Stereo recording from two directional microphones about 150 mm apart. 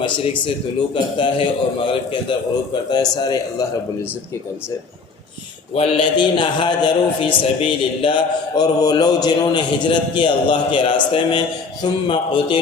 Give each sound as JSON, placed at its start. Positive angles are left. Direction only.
{"t": 1.2, "sound": "a man's voice", "side_deg": 35}
{"t": 5.7, "sound": "a man's voice", "side_deg": 40}